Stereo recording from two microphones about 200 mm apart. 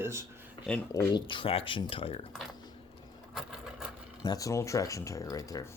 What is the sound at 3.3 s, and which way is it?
Vehicle, centre (ahead or behind).